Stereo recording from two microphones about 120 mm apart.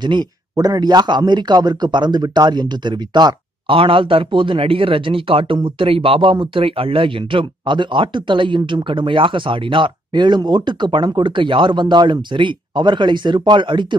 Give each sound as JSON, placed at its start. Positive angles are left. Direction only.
{"t": 0.0, "sound": "speech", "side_deg": -35}